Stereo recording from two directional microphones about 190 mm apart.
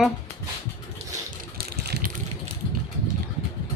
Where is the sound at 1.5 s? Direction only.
55° right (ahead or behind).